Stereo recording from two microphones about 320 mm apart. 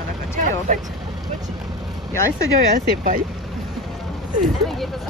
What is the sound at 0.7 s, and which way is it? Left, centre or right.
Speech, right.